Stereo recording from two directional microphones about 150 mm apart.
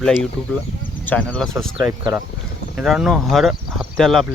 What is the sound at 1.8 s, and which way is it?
Speech, 20° right (ahead or behind).